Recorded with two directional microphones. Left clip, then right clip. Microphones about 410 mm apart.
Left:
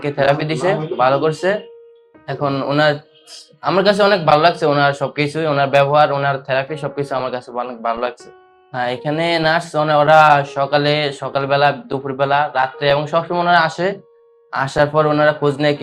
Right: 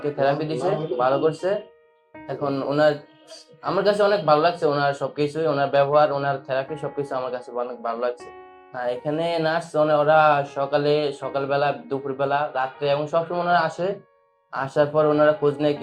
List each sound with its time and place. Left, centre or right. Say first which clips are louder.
0.0 s speech: left 6 dB; left
2.2 s speech: left 6 dB; left